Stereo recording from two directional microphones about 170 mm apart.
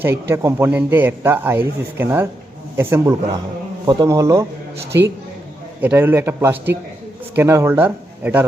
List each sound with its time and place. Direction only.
0.0 s a man's voice: 15° right (ahead or behind)
5.8 s a man's voice: 10° right (ahead or behind)